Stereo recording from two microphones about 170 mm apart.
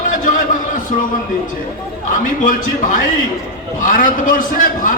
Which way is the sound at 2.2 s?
55° left (ahead or behind).